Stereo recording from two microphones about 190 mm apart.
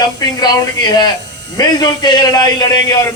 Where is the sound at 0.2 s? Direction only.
20° left (ahead or behind).